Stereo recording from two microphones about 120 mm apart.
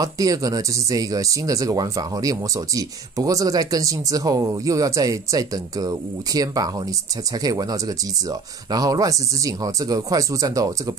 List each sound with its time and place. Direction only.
0.0 s speech: 30° right (ahead or behind)